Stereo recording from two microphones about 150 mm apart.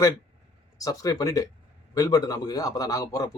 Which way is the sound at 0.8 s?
25° left (ahead or behind).